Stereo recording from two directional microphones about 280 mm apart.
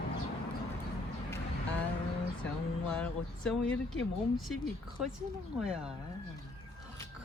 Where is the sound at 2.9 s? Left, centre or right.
Centre.